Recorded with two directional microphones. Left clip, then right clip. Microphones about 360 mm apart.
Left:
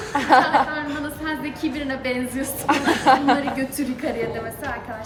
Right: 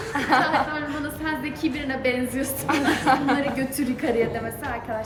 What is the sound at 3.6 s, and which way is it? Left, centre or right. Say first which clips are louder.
Speech: even; centre.